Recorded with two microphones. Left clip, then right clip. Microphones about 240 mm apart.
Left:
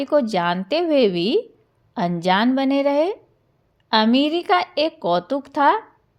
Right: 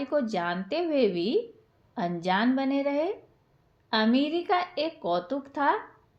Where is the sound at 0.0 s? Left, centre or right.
Left.